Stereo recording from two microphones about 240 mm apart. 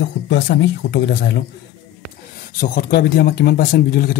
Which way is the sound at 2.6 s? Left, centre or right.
Left.